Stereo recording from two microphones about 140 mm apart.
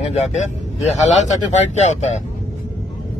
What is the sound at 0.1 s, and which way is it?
Speech, 55° left (ahead or behind).